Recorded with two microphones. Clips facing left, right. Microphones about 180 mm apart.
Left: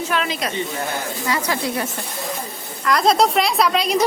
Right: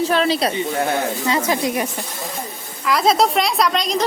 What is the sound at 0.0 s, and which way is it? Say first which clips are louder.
Speech: right 6 dB; 35° right (ahead or behind).